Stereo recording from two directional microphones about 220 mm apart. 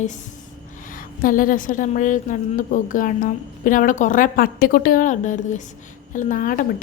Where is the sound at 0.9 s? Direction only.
40° left (ahead or behind).